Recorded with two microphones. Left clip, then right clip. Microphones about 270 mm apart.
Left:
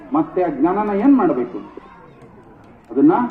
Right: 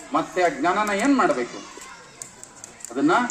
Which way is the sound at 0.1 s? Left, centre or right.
Right.